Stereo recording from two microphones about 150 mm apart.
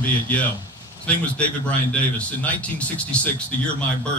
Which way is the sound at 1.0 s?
10° left (ahead or behind).